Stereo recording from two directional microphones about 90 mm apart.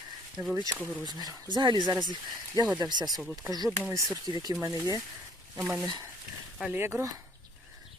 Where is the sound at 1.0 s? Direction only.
50° right (ahead or behind).